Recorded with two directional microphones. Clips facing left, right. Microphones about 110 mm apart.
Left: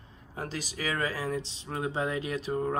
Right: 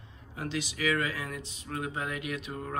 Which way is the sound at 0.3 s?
40° left (ahead or behind).